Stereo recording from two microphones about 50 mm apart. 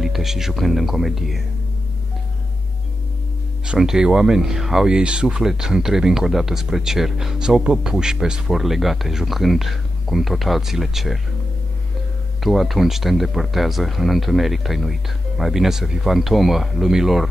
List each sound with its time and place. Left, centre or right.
0.0 s speech: centre
3.6 s speech: centre
4.8 s speech: centre
5.4 s speech: centre
12.4 s speech: centre